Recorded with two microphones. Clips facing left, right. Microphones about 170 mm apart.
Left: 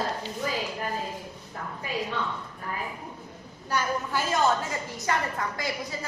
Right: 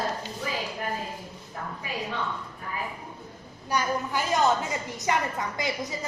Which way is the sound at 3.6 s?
15° right (ahead or behind).